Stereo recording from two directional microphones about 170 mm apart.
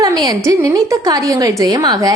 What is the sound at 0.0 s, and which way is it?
A woman's voice, 20° right (ahead or behind).